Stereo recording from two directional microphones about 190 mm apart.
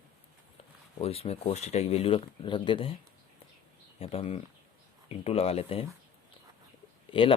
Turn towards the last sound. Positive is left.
turn(degrees=25)  # may be behind; listen again after turning